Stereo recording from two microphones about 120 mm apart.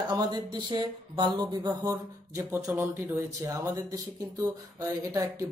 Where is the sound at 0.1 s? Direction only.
35° right (ahead or behind).